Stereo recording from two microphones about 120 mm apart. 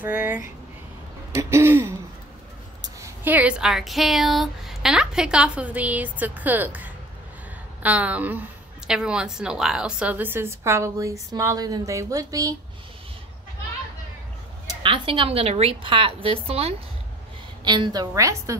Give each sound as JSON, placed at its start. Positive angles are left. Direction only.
{"t": 0.0, "sound": "a woman's voice", "side_deg": -10}
{"t": 1.3, "sound": "throat clearing", "side_deg": -20}
{"t": 3.3, "sound": "a woman's voice", "side_deg": -10}
{"t": 14.8, "sound": "a woman's voice", "side_deg": -45}
{"t": 17.6, "sound": "a woman's voice", "side_deg": -40}
{"t": 18.1, "sound": "throat clearing", "side_deg": -25}